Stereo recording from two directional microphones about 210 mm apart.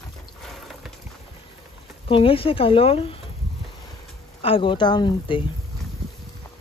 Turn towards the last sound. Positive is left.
turn(degrees=20)  # may be behind; listen again after turning